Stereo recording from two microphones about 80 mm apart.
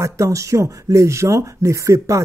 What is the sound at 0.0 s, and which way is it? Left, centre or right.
Speech, right.